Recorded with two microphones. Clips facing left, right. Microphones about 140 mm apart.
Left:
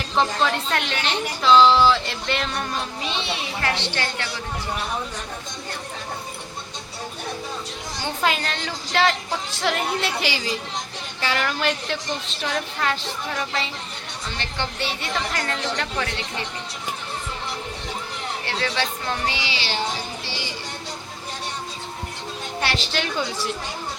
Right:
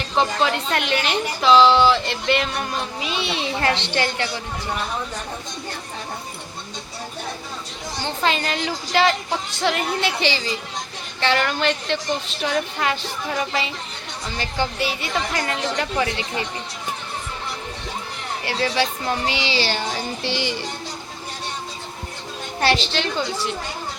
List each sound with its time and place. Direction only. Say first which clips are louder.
0.2 s a woman's voice: right 1 dB; 5° right (ahead or behind)
3.2 s a woman's voice: right 7 dB; 20° right (ahead or behind)
8.0 s a woman's voice: right 1 dB; 5° left (ahead or behind)
14.3 s a woman's voice: right 5 dB; 5° right (ahead or behind)
18.4 s a woman's voice: right 5 dB; 15° right (ahead or behind)
19.5 s music: right 5 dB; 45° right (ahead or behind)
20.2 s music: right 8 dB; 65° right (ahead or behind)
22.8 s a woman's voice: right 2 dB; 5° left (ahead or behind)